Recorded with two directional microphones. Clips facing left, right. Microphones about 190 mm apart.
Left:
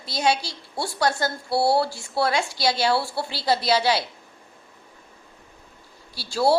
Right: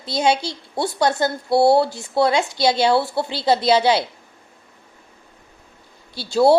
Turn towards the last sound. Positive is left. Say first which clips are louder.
# right 6 dB
turn(degrees=-20)  # may be behind; listen again after turning